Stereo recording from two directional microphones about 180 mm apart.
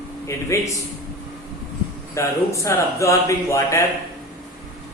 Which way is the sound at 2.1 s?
15° left (ahead or behind).